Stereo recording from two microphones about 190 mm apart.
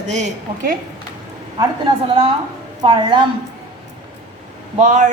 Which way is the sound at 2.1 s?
30° right (ahead or behind).